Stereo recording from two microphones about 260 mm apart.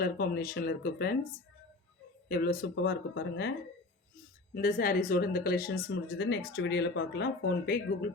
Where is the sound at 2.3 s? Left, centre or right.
Left.